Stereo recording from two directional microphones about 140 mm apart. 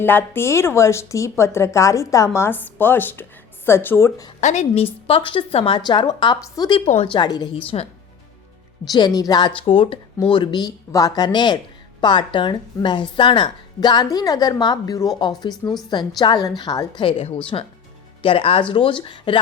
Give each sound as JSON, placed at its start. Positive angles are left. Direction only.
{"t": 0.0, "sound": "speech", "side_deg": 15}
{"t": 4.4, "sound": "a woman's voice", "side_deg": 55}
{"t": 5.0, "sound": "speech", "side_deg": 40}
{"t": 6.8, "sound": "speech", "side_deg": 45}
{"t": 8.9, "sound": "speech", "side_deg": 30}
{"t": 9.6, "sound": "speech", "side_deg": 40}